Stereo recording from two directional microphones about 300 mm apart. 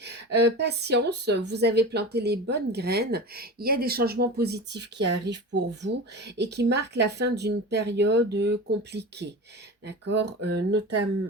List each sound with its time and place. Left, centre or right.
0.0 s speech: right